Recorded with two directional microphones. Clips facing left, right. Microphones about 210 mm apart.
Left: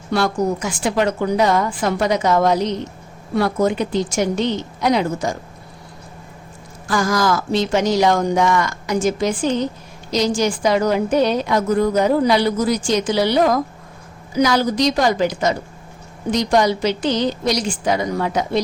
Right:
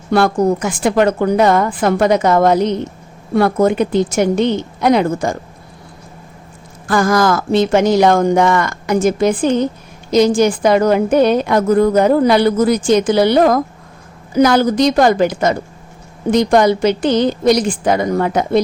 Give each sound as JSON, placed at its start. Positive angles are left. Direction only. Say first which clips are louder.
{"t": 0.1, "sound": "speech", "louder": "right 6 dB", "side_deg": -55}
{"t": 6.8, "sound": "a woman's voice", "louder": "right 5 dB", "side_deg": -55}